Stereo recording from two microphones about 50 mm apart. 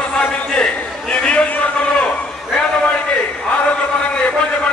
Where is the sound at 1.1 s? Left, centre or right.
Left.